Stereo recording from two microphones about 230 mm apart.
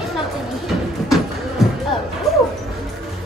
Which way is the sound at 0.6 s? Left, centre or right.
Centre.